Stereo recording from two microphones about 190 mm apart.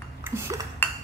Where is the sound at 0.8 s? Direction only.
10° left (ahead or behind).